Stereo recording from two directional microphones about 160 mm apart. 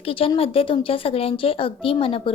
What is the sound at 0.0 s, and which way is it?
A woman's voice, 35° left (ahead or behind).